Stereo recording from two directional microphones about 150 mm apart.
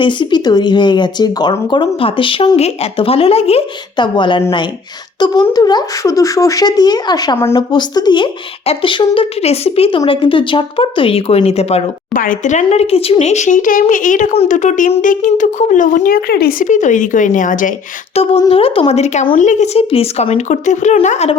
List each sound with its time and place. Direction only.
0.0 s speech: 30° left (ahead or behind)
12.1 s speech: 65° left (ahead or behind)
12.6 s speech: 45° left (ahead or behind); by 17.7 s 60° left (ahead or behind)
18.1 s a sound: 40° left (ahead or behind)
18.4 s speech: 40° left (ahead or behind)